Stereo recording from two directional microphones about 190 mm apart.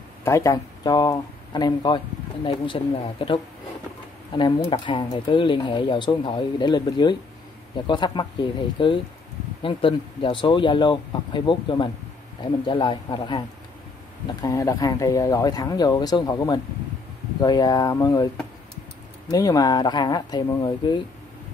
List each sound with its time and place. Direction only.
0.2 s speech: 15° left (ahead or behind)
14.4 s speech: 15° left (ahead or behind)
19.3 s speech: 20° left (ahead or behind)